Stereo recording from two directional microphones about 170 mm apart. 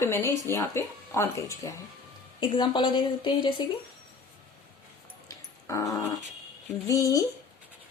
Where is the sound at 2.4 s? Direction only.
30° left (ahead or behind).